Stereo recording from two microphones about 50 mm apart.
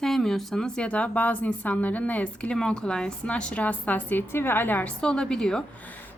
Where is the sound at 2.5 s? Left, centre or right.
Centre; by 4.8 s left.